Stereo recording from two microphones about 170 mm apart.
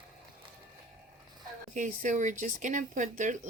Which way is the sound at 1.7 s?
45° right (ahead or behind).